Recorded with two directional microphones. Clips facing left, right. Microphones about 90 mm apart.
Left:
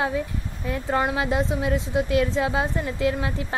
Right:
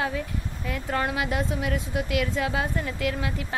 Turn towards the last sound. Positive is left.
turn(degrees=30)  # may be behind; listen again after turning